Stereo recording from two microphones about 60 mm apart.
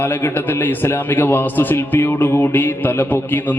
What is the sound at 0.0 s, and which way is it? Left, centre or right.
A man's voice, left.